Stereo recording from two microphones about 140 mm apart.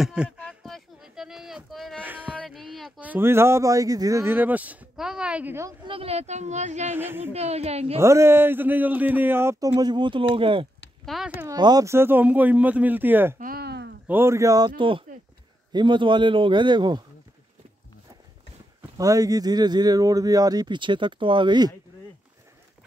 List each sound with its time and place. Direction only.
0.0 s a sound: 5° right (ahead or behind)
2.0 s music: 15° right (ahead or behind)
2.3 s music: centre (ahead or behind)
3.0 s speech: 15° right (ahead or behind)
5.9 s speech: 45° right (ahead or behind)
7.0 s speech: 15° right (ahead or behind)
7.3 s speech: 45° right (ahead or behind)
8.0 s speech: 20° right (ahead or behind); by 10.7 s 40° right (ahead or behind)
11.1 s speech: centre (ahead or behind)
11.4 s speech: 30° right (ahead or behind)
14.8 s a man's voice: 40° right (ahead or behind)
18.9 s speech: 25° right (ahead or behind)